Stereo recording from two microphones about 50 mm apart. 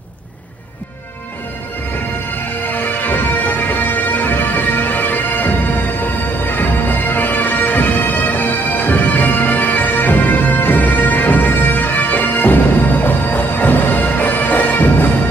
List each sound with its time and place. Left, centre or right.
2.7 s music: left